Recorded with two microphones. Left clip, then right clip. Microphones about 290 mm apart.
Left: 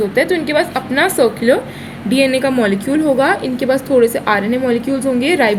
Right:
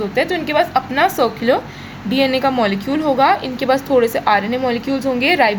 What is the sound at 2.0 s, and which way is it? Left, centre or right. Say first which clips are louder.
Speech: left 2 dB; right.